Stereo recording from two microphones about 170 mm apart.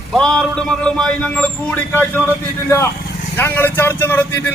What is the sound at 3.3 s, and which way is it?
A woman's voice, 15° left (ahead or behind).